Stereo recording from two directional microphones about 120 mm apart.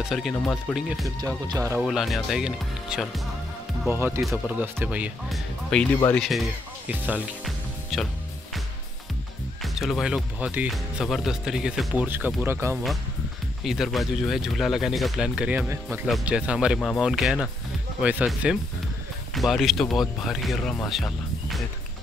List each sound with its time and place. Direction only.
0.0 s speech: centre (ahead or behind)
1.2 s speech: 30° right (ahead or behind)
1.8 s speech: centre (ahead or behind)
3.9 s speech: 20° right (ahead or behind)
5.3 s speech: 10° left (ahead or behind)
6.9 s speech: 10° right (ahead or behind)
7.4 s music: centre (ahead or behind)
9.6 s speech: centre (ahead or behind)
10.7 s speech: centre (ahead or behind); by 12.7 s 20° right (ahead or behind)
13.7 s speech: centre (ahead or behind)